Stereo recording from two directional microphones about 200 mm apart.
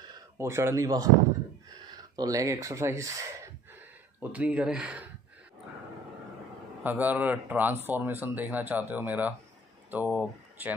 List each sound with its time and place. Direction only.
0.4 s speech: 10° right (ahead or behind)
6.8 s speech: 10° right (ahead or behind)